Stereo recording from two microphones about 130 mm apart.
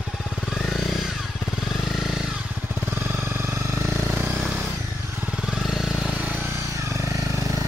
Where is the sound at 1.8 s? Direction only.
Centre (ahead or behind).